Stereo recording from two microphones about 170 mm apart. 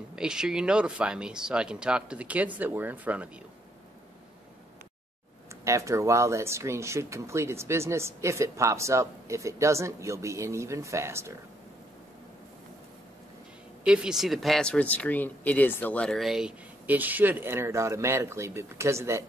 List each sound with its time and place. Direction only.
0.1 s speech: 5° right (ahead or behind)
5.6 s speech: 20° right (ahead or behind)
13.8 s speech: 5° right (ahead or behind)